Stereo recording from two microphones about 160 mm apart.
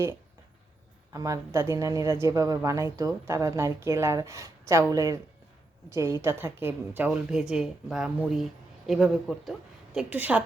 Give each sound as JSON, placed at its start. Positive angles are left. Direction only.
{"t": 1.1, "sound": "a woman's voice", "side_deg": -20}